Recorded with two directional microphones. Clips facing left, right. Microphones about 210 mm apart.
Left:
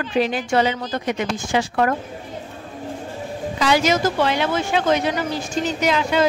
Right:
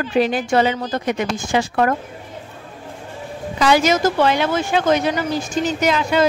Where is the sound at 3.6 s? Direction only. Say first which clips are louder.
Right 3 dB; 50° right (ahead or behind).